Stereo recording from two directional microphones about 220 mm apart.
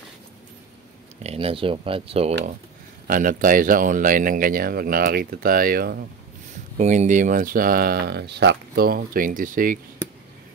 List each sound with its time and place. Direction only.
1.2 s speech: 25° right (ahead or behind)
3.1 s speech: 40° right (ahead or behind)
6.8 s speech: 30° right (ahead or behind)